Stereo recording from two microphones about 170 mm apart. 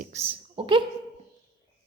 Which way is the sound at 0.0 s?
40° right (ahead or behind).